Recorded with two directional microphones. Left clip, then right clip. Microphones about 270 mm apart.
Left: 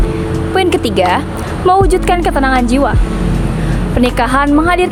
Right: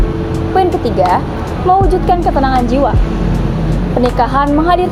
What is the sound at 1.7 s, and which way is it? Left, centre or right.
A woman's voice, left.